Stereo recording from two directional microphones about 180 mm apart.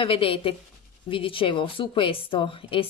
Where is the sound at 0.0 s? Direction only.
30° left (ahead or behind).